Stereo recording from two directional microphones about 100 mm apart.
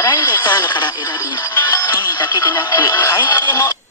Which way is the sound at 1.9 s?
45° left (ahead or behind).